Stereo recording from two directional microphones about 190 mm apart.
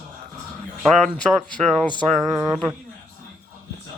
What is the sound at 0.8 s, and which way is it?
Speech, centre (ahead or behind).